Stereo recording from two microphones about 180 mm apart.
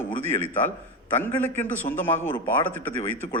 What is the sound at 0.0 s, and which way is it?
Speech, 10° left (ahead or behind).